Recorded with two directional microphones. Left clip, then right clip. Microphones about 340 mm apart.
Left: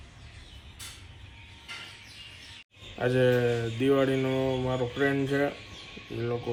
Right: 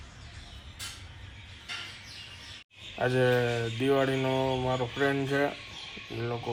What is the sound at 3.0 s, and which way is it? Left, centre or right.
Speech, centre.